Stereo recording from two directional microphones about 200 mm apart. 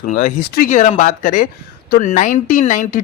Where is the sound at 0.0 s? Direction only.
40° left (ahead or behind).